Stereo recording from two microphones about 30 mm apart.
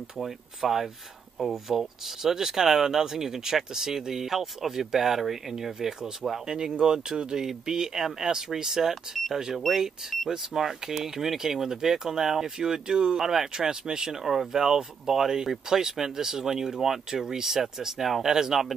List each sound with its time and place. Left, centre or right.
0.2 s speech: centre
6.4 s speech: right
13.2 s speech: centre
13.7 s speech: right
14.2 s speech: centre